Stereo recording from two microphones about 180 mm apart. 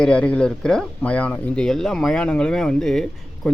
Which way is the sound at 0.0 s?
5° left (ahead or behind).